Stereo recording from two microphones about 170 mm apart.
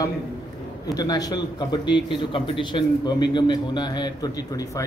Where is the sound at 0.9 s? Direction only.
20° left (ahead or behind).